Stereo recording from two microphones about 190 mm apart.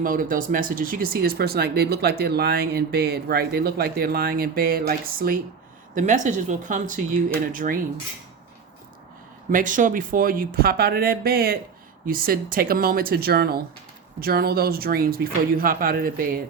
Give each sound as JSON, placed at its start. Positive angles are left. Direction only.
{"t": 0.0, "sound": "speech", "side_deg": -45}
{"t": 9.5, "sound": "speech", "side_deg": -45}